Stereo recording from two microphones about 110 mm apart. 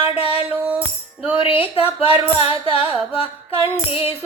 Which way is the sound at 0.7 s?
10° right (ahead or behind).